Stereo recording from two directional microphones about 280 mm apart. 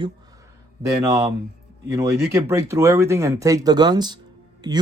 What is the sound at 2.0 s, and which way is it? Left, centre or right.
Speech, centre.